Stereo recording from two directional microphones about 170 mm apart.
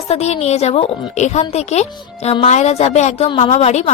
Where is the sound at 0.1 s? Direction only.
40° left (ahead or behind).